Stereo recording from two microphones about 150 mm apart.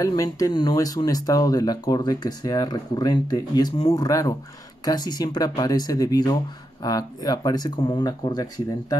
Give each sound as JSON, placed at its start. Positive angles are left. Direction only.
{"t": 0.0, "sound": "speech", "side_deg": 20}